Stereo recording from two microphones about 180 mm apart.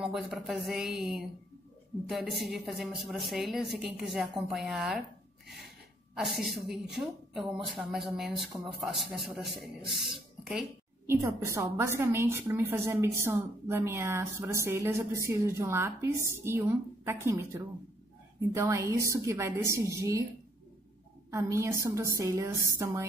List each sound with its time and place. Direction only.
0.0 s a woman's voice: centre (ahead or behind)
6.1 s a woman's voice: centre (ahead or behind)
11.1 s a woman's voice: 15° right (ahead or behind)
21.3 s a woman's voice: 15° right (ahead or behind)